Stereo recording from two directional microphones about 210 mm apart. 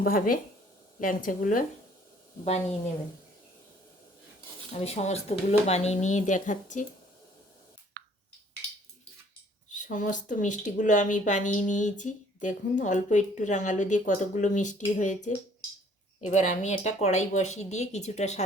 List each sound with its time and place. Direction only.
0.0 s speech: 45° left (ahead or behind)
4.7 s speech: 30° left (ahead or behind)
9.7 s speech: 35° left (ahead or behind)